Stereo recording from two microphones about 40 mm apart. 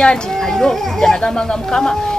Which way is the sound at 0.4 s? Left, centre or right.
Centre.